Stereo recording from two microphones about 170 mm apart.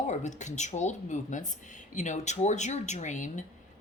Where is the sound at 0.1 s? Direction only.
45° left (ahead or behind).